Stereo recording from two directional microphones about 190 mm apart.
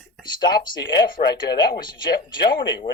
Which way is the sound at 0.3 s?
20° left (ahead or behind).